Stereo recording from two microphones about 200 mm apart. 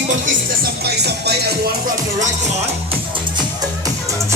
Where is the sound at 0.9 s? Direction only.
55° right (ahead or behind).